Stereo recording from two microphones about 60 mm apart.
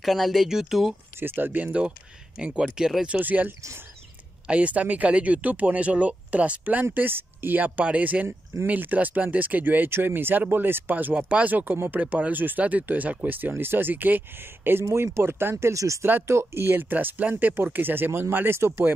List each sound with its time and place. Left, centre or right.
0.0 s speech: centre
1.2 s speech: right
1.7 s speech: centre
3.2 s speech: right
15.6 s speech: right
16.0 s speech: right
16.3 s speech: right
16.9 s speech: right